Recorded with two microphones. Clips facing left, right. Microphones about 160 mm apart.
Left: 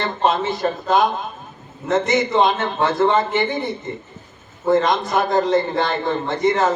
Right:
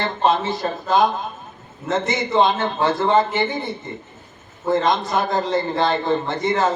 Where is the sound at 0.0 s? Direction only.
25° right (ahead or behind).